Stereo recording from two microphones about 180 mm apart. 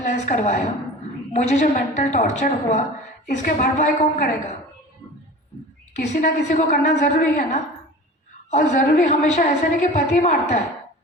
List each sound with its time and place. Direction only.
0.0 s a woman's voice: 40° left (ahead or behind)
6.1 s a woman's voice: 40° left (ahead or behind)